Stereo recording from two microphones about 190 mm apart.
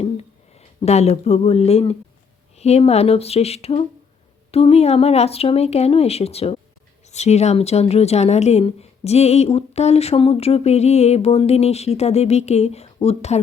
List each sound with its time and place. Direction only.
0.5 s speech: 35° left (ahead or behind)